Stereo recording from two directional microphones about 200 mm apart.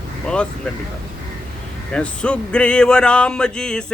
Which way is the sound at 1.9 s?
5° left (ahead or behind).